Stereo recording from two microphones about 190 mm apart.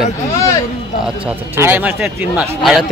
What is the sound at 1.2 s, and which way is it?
A man's voice, 10° right (ahead or behind).